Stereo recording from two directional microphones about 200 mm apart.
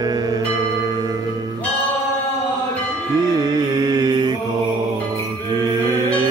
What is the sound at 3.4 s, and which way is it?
Music, 20° right (ahead or behind).